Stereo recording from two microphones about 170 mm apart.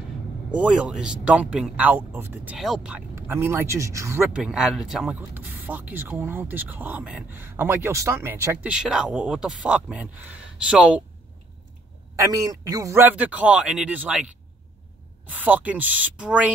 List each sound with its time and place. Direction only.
0.5 s speech: 5° right (ahead or behind)
3.2 s speech: 15° right (ahead or behind)
4.4 s speech: centre (ahead or behind)
12.2 s speech: 20° right (ahead or behind)
15.3 s speech: 10° right (ahead or behind)